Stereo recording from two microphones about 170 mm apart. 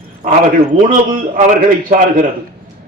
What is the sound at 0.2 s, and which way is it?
A man's voice, 55° right (ahead or behind).